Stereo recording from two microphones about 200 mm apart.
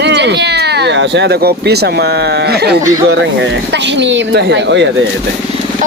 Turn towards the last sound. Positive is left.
turn(degrees=-65)  # may be behind; listen again after turning